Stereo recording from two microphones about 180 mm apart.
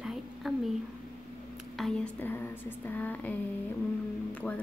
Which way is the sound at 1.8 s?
5° left (ahead or behind).